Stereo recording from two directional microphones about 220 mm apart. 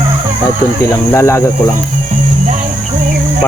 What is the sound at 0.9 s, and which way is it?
Speech, 10° left (ahead or behind).